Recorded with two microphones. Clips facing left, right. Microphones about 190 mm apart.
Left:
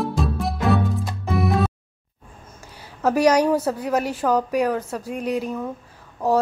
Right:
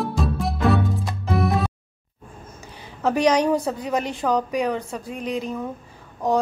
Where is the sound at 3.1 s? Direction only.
10° left (ahead or behind).